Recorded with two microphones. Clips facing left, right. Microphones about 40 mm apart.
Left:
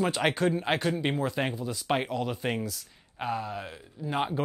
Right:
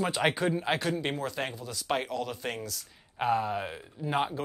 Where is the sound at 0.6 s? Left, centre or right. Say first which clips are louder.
Left 2 dB; centre.